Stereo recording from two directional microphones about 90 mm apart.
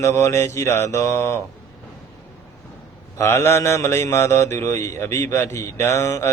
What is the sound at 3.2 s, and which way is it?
Mantra, 30° left (ahead or behind).